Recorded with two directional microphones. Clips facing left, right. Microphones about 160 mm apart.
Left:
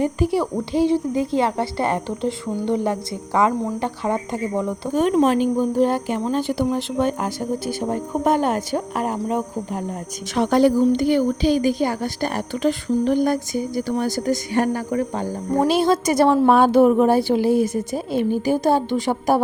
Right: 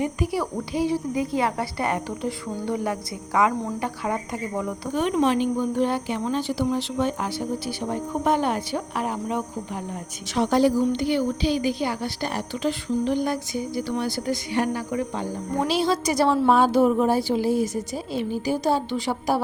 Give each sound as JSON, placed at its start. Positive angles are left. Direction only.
{"t": 0.0, "sound": "a woman's voice", "side_deg": 30}
{"t": 4.9, "sound": "a woman's voice", "side_deg": 40}
{"t": 10.3, "sound": "a woman's voice", "side_deg": 55}